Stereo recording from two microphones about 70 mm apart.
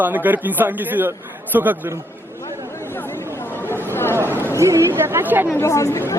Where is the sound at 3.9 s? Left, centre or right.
Left.